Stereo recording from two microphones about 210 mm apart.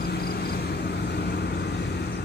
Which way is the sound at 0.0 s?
50° left (ahead or behind).